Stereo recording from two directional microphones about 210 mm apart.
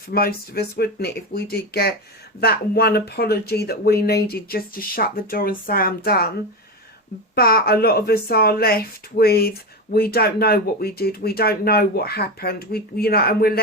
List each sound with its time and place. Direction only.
0.1 s speech: 45° left (ahead or behind)
7.3 s speech: 45° left (ahead or behind)